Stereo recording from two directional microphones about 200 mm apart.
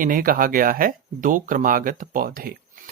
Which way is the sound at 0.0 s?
45° right (ahead or behind).